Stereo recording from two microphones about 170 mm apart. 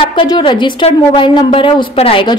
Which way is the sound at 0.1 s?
30° left (ahead or behind).